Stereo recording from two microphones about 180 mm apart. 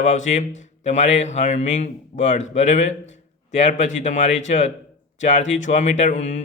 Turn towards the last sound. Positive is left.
turn(degrees=40)  # may be behind; listen again after turning